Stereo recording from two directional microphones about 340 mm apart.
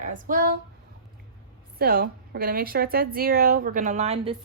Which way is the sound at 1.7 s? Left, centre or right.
Right.